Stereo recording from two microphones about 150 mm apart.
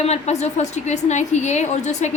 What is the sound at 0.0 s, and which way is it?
A woman's voice, 45° left (ahead or behind).